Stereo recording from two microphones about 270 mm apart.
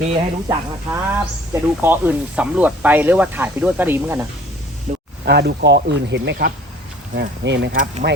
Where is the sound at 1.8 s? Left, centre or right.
Centre.